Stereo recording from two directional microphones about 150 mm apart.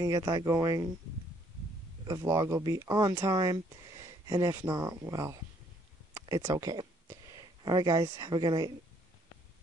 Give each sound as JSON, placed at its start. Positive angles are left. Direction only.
{"t": 0.0, "sound": "speech", "side_deg": -25}
{"t": 2.0, "sound": "speech", "side_deg": -20}